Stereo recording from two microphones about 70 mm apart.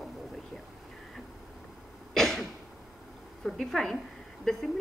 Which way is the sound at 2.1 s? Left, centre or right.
Centre.